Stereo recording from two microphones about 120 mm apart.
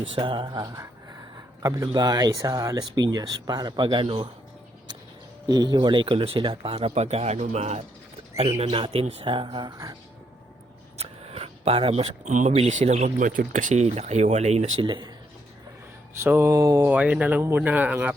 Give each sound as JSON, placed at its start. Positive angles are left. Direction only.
{"t": 0.1, "sound": "speech", "side_deg": -45}
{"t": 1.6, "sound": "speech", "side_deg": -30}
{"t": 5.5, "sound": "speech", "side_deg": -35}
{"t": 8.6, "sound": "speech", "side_deg": -50}
{"t": 10.9, "sound": "a sound", "side_deg": -60}
{"t": 12.2, "sound": "speech", "side_deg": -90}
{"t": 14.8, "sound": "speech", "side_deg": -40}
{"t": 16.2, "sound": "a sound", "side_deg": -20}
{"t": 16.9, "sound": "speech", "side_deg": -10}